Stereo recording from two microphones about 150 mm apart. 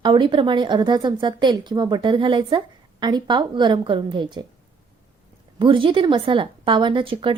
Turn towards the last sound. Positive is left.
turn(degrees=-35)  # may be behind; listen again after turning